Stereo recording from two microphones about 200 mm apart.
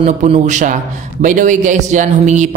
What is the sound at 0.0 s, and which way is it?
Speech, 35° right (ahead or behind).